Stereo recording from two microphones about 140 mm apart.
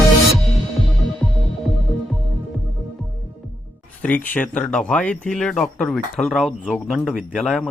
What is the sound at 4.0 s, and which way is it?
A man's voice, 10° left (ahead or behind).